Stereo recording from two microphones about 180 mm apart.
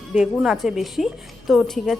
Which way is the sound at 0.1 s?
5° right (ahead or behind).